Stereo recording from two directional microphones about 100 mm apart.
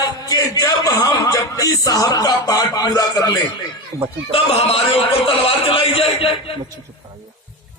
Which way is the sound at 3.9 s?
25° right (ahead or behind).